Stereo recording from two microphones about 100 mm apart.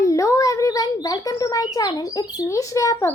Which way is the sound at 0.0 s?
30° left (ahead or behind).